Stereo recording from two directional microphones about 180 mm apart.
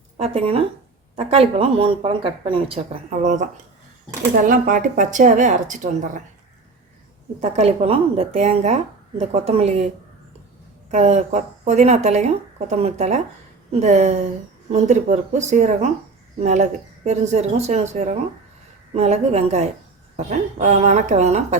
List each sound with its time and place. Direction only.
0.2 s a woman's voice: 35° right (ahead or behind)
7.4 s a woman's voice: 35° right (ahead or behind)
10.9 s a woman's voice: 40° right (ahead or behind)